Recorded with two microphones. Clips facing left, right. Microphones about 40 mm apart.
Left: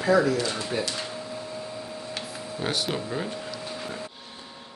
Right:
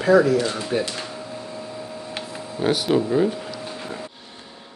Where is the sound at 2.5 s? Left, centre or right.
Centre.